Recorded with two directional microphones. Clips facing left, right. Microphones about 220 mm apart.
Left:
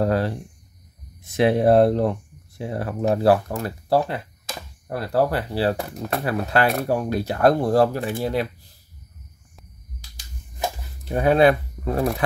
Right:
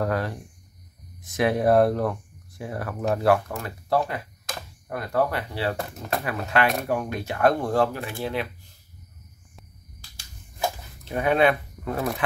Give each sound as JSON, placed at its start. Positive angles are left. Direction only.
{"t": 0.0, "sound": "a sound", "side_deg": 30}
{"t": 1.2, "sound": "speech", "side_deg": 25}
{"t": 11.1, "sound": "speech", "side_deg": 35}